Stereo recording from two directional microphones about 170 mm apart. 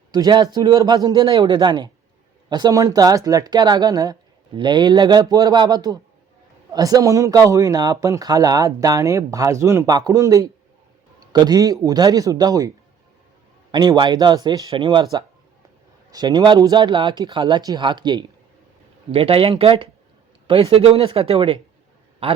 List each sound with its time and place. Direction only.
0.1 s a man's voice: 25° right (ahead or behind)